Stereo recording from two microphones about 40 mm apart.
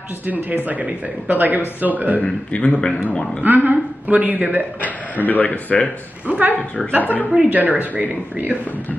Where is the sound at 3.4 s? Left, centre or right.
Right.